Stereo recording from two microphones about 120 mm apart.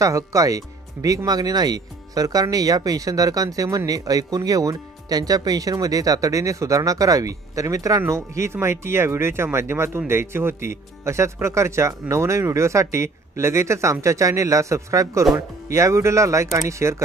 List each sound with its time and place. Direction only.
0.0 s speech: 25° right (ahead or behind)